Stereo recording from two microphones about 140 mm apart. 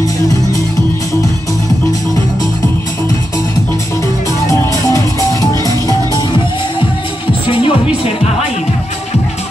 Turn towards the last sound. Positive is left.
turn(degrees=40)  # may be behind; listen again after turning